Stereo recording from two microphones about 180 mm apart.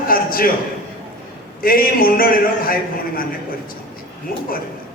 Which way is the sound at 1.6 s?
55° left (ahead or behind).